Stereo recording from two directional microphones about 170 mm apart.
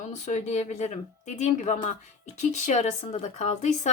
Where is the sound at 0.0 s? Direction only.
45° left (ahead or behind).